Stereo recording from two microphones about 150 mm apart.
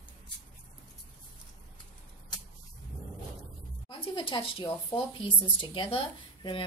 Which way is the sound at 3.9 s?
35° left (ahead or behind).